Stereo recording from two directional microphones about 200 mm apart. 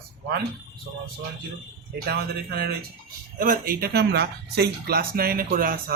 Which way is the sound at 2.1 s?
50° right (ahead or behind).